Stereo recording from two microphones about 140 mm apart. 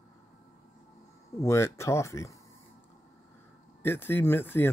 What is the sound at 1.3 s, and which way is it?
Speech, 20° left (ahead or behind).